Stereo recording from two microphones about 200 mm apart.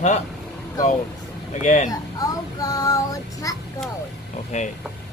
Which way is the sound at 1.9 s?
20° left (ahead or behind).